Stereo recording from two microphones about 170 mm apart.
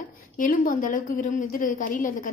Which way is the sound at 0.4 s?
50° left (ahead or behind).